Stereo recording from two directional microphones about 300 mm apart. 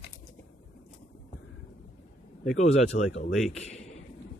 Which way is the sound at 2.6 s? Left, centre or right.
Left.